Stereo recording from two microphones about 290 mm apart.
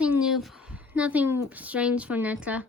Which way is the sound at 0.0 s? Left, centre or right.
Centre.